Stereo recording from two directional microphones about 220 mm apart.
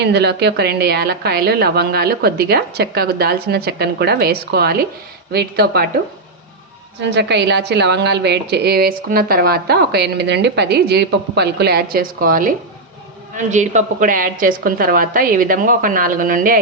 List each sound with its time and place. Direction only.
0.0 s a woman's voice: 50° right (ahead or behind)
7.0 s a woman's voice: 50° right (ahead or behind)